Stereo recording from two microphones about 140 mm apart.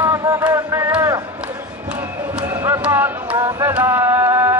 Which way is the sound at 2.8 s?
10° right (ahead or behind).